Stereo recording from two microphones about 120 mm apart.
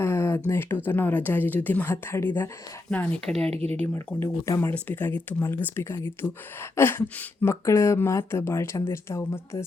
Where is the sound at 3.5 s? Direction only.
60° right (ahead or behind).